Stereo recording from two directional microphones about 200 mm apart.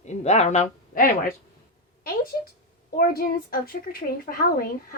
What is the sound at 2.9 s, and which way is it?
A woman's voice, 45° left (ahead or behind).